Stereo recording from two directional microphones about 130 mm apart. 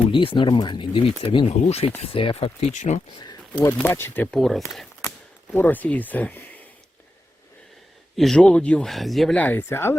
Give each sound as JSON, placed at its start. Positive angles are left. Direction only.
{"t": 0.1, "sound": "speech", "side_deg": 40}
{"t": 2.7, "sound": "speech", "side_deg": 65}
{"t": 3.2, "sound": "a sound", "side_deg": 35}
{"t": 3.7, "sound": "speech", "side_deg": 15}
{"t": 4.3, "sound": "speech", "side_deg": 0}
{"t": 5.5, "sound": "speech", "side_deg": 15}
{"t": 8.1, "sound": "speech", "side_deg": 0}
{"t": 9.4, "sound": "speech", "side_deg": 15}